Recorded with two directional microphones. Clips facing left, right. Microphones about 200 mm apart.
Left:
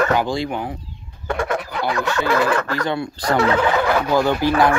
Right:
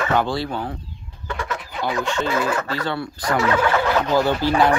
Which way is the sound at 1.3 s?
50° left (ahead or behind).